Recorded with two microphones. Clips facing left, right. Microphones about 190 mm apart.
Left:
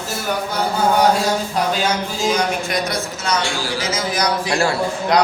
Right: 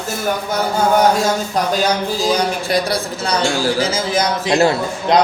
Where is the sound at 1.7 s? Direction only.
35° right (ahead or behind).